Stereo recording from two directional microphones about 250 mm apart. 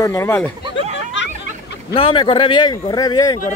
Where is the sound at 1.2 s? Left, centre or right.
Left.